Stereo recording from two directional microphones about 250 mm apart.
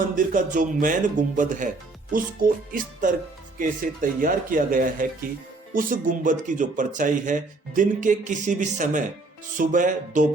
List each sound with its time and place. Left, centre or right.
0.2 s speech: right